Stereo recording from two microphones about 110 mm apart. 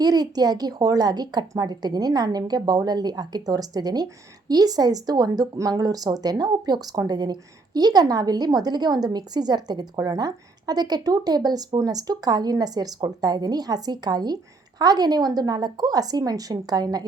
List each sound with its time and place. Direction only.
0.0 s a woman's voice: 35° right (ahead or behind)